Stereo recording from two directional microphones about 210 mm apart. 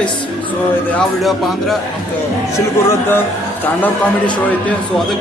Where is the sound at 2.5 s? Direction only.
10° left (ahead or behind).